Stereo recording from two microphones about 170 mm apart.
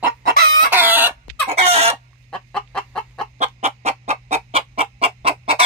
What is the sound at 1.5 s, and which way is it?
Chicken, 35° right (ahead or behind).